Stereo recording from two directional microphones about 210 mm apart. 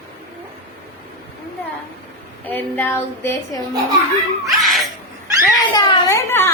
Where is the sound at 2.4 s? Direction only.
10° left (ahead or behind).